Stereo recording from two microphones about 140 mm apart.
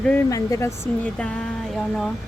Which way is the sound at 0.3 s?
25° left (ahead or behind).